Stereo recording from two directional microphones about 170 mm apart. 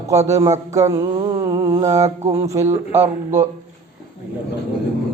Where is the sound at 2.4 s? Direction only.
15° right (ahead or behind).